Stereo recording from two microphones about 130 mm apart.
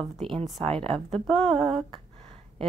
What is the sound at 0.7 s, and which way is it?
Speech, 45° right (ahead or behind).